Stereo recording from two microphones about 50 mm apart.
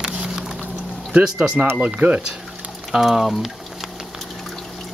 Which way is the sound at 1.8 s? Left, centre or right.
Right.